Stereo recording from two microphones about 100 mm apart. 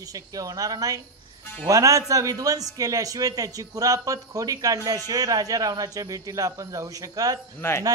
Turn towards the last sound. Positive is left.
turn(degrees=25)  # may be behind; listen again after turning